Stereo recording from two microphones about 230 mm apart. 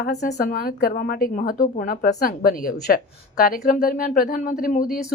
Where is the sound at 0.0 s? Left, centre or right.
Left.